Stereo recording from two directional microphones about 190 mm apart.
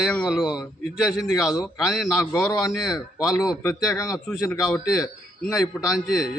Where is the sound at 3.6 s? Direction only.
15° left (ahead or behind).